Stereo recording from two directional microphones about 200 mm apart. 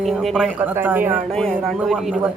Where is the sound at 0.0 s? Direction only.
Centre (ahead or behind).